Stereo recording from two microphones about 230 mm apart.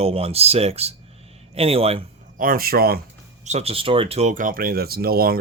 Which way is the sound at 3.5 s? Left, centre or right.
Right.